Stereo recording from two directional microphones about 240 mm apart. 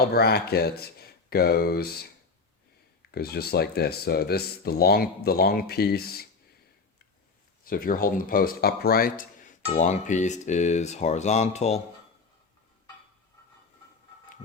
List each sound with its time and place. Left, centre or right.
0.0 s speech: left
3.1 s speech: left
7.6 s speech: left